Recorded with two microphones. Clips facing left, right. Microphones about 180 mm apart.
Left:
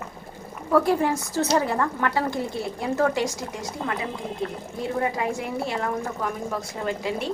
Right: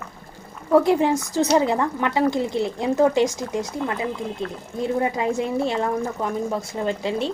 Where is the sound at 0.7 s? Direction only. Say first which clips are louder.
Right 4 dB; 20° right (ahead or behind).